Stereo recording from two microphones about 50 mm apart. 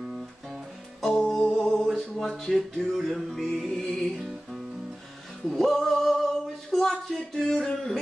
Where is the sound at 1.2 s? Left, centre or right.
Centre.